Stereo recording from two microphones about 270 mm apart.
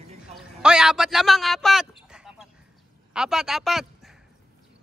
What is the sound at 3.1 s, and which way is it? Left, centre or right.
Speech, centre.